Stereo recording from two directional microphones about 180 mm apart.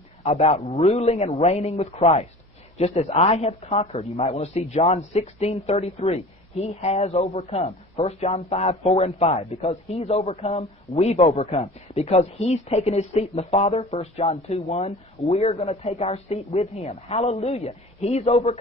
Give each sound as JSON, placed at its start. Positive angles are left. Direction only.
{"t": 0.2, "sound": "speech", "side_deg": 35}